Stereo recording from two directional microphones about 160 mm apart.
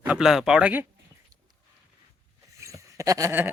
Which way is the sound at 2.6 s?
20° right (ahead or behind).